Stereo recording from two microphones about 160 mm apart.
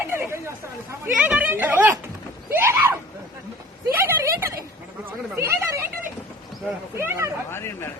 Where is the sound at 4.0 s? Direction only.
15° right (ahead or behind).